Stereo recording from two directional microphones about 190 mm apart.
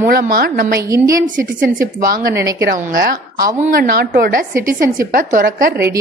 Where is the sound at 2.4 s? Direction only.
15° right (ahead or behind).